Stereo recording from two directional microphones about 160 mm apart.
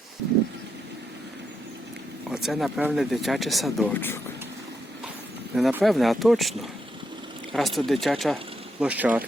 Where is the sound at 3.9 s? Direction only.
15° left (ahead or behind).